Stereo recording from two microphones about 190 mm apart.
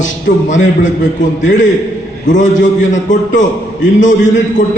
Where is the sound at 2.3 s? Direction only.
40° left (ahead or behind).